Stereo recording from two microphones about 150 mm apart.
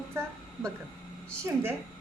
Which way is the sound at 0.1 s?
15° right (ahead or behind).